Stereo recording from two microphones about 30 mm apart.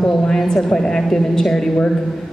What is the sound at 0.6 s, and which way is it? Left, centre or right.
Speech, left.